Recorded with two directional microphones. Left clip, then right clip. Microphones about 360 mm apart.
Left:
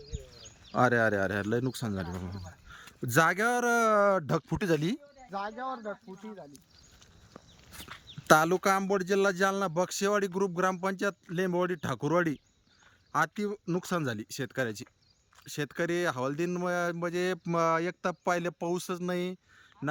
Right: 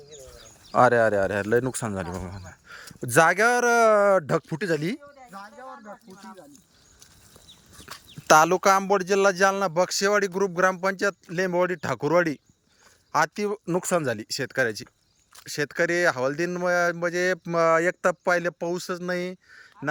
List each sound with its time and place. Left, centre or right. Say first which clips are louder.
0.7 s speech: right 7 dB; centre
5.5 s speech: left 5 dB; left
7.9 s a sound: right 7 dB; right
8.3 s speech: right 6 dB; centre